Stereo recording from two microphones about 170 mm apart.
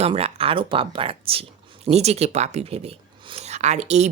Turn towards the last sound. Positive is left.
turn(degrees=-40)  # may be behind; listen again after turning